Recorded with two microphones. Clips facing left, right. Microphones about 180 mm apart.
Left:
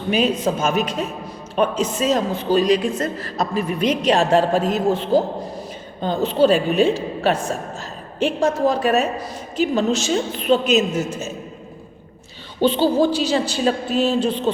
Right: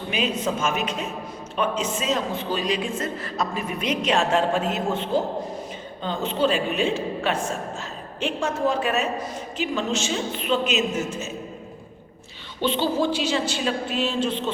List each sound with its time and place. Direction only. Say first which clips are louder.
0.1 s a woman's voice: left 6 dB; 40° left (ahead or behind)
12.6 s a woman's voice: left 6 dB; 35° left (ahead or behind)